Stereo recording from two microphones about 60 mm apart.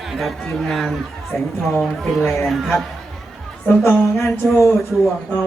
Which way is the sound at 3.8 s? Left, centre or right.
Left.